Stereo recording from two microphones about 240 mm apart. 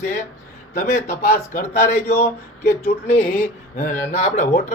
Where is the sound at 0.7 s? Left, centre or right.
Left.